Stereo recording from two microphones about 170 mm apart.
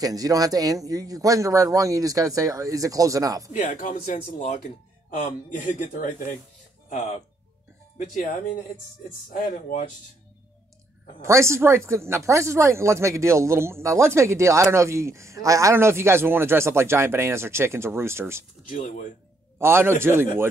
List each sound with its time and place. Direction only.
0.0 s a man's voice: 20° right (ahead or behind)
3.6 s a man's voice: 50° left (ahead or behind)
11.2 s speech: 15° right (ahead or behind)
18.7 s a man's voice: 55° left (ahead or behind)
19.6 s speech: 15° right (ahead or behind)